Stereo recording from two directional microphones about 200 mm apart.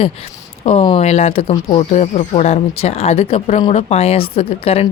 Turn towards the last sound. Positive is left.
turn(degrees=30)  # may be behind; listen again after turning